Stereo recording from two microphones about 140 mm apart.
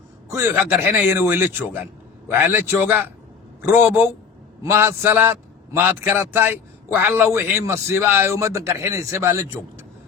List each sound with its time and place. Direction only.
0.3 s a man's voice: 20° right (ahead or behind)